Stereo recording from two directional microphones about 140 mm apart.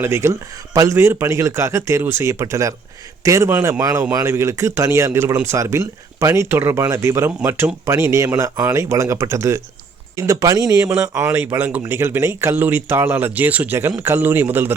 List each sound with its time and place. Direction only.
0.0 s speech: 20° right (ahead or behind)